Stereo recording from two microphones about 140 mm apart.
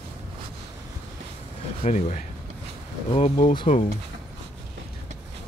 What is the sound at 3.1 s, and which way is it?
Speech, 50° left (ahead or behind).